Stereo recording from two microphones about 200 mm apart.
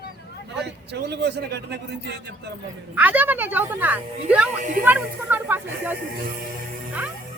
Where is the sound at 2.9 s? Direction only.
10° right (ahead or behind).